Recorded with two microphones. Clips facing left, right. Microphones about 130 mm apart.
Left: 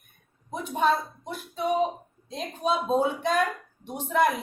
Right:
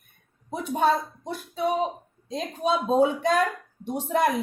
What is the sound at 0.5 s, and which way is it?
Speech, 35° right (ahead or behind).